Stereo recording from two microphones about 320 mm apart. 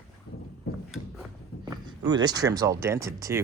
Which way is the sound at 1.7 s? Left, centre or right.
Centre.